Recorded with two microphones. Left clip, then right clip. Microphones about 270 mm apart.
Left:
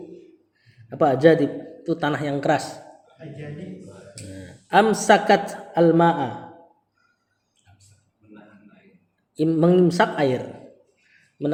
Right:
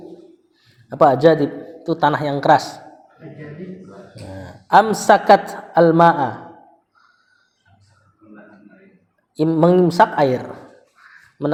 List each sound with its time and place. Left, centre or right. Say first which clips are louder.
0.9 s a man's voice: right 4 dB; centre
4.7 s a man's voice: right 4 dB; centre
9.3 s a man's voice: right 4 dB; centre